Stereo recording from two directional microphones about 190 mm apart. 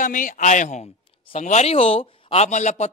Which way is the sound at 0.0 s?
45° left (ahead or behind).